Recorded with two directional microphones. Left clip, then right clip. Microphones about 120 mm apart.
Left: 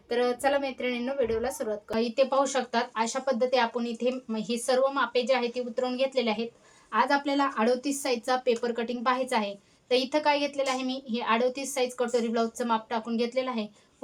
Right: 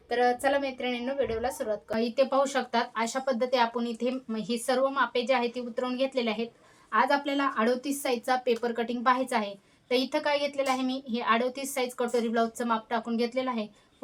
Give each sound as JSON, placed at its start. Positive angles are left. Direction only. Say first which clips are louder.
{"t": 0.1, "sound": "a woman's voice", "louder": "right 1 dB", "side_deg": 5}
{"t": 2.0, "sound": "speech", "louder": "left 1 dB", "side_deg": 15}